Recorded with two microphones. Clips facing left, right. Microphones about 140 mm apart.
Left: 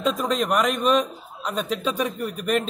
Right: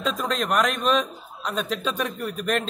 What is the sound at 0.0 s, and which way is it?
A man's voice, 5° left (ahead or behind).